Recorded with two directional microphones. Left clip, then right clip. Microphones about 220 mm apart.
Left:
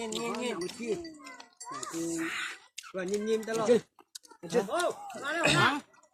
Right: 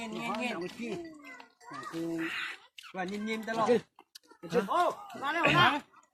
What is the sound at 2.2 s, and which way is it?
Speech, 25° left (ahead or behind).